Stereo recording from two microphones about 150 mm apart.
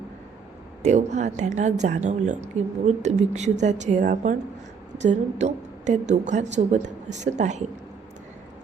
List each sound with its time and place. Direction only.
0.8 s a woman's voice: 50° right (ahead or behind)